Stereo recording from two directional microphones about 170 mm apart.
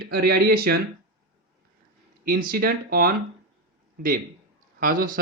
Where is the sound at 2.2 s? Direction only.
60° right (ahead or behind).